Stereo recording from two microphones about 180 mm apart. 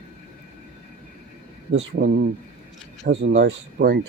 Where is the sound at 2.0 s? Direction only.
60° right (ahead or behind).